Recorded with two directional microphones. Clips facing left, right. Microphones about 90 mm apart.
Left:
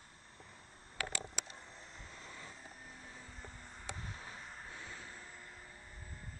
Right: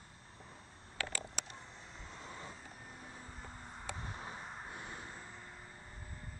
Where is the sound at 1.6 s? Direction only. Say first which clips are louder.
Right 1 dB; centre (ahead or behind).